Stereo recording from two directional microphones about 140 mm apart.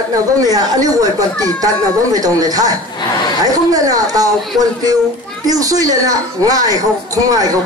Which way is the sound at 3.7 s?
25° right (ahead or behind).